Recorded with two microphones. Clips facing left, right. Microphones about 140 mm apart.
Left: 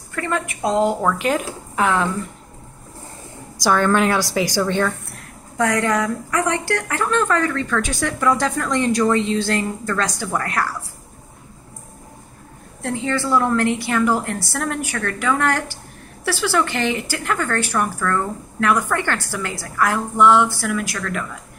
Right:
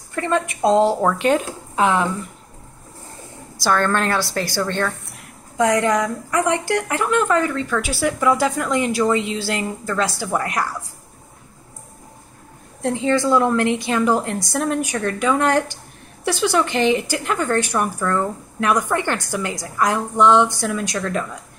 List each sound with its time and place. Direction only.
0.1 s a woman's voice: 25° right (ahead or behind)
1.8 s speech: 20° right (ahead or behind)
3.6 s a woman's voice: 10° left (ahead or behind)
5.6 s a woman's voice: 15° right (ahead or behind)
12.8 s speech: 20° right (ahead or behind)